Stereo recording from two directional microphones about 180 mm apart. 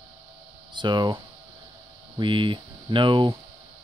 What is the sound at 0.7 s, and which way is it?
Speech, 25° right (ahead or behind).